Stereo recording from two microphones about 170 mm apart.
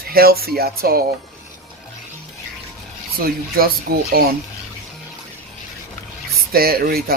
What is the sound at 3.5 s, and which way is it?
Speech, 60° right (ahead or behind).